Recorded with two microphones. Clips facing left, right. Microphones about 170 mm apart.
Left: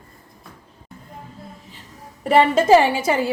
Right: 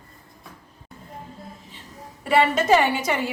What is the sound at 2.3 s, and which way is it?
A woman's voice, 30° left (ahead or behind).